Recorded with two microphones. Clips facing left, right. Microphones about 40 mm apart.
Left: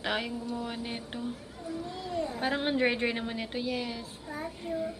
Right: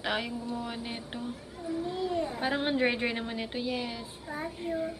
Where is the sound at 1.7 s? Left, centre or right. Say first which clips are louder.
Right 5 dB; centre.